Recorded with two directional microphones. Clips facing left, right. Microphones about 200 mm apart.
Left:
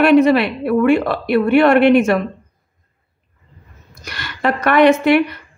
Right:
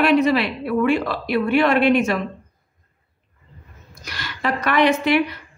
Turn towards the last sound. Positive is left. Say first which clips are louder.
# left 6 dB
turn(degrees=55)  # may be behind; listen again after turning